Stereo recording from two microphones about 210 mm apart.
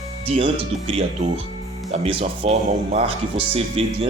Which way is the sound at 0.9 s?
30° right (ahead or behind).